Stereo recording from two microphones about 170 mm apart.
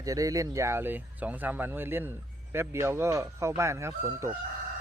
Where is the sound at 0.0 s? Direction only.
20° right (ahead or behind).